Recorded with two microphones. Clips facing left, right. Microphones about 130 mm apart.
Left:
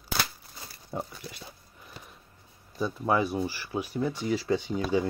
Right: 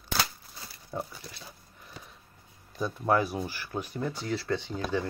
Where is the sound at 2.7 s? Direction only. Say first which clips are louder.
Even; centre (ahead or behind).